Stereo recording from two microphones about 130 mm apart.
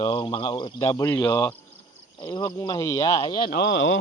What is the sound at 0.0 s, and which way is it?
Speech, 35° left (ahead or behind).